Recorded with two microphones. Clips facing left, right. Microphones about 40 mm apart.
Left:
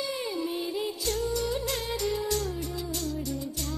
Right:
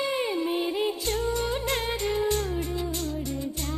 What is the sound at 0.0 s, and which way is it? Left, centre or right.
Music, right.